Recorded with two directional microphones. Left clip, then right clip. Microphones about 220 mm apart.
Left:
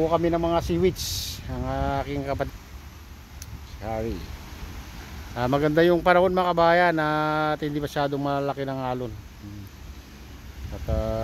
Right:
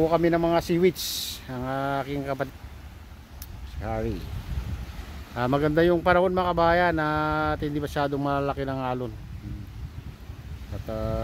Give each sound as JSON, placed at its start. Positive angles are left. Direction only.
{"t": 0.0, "sound": "speech", "side_deg": -10}
{"t": 3.8, "sound": "speech", "side_deg": -10}
{"t": 5.3, "sound": "speech", "side_deg": -5}
{"t": 10.9, "sound": "speech", "side_deg": 0}